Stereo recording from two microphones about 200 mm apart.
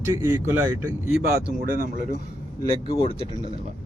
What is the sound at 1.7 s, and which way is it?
Speech, 45° right (ahead or behind).